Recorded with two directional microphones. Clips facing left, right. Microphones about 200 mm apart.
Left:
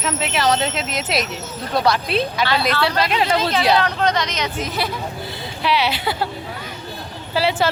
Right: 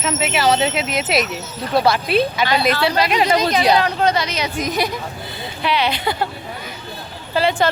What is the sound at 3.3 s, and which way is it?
Speech, 15° right (ahead or behind).